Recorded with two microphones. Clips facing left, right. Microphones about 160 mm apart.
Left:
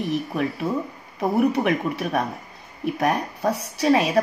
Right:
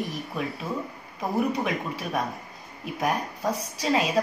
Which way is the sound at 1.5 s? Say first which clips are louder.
Left 6 dB; 65° left (ahead or behind).